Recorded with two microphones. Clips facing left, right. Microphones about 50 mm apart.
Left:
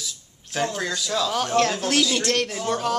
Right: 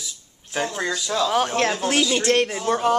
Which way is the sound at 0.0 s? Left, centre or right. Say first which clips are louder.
Left 1 dB; centre.